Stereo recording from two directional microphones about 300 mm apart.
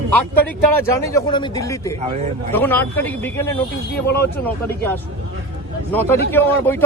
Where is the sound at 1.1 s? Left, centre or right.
Centre.